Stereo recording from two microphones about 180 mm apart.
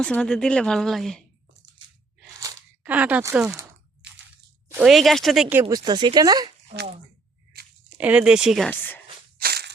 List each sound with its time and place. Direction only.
0.0 s speech: 5° left (ahead or behind)
2.8 s speech: 10° right (ahead or behind)
4.7 s speech: 5° right (ahead or behind)
5.6 s speech: 25° right (ahead or behind)
7.5 s tearing: 60° right (ahead or behind)
7.9 s speech: 5° right (ahead or behind)
9.4 s crushing: 65° right (ahead or behind)